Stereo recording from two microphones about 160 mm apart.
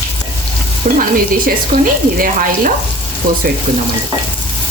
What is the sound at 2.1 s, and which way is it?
Speech, 60° right (ahead or behind).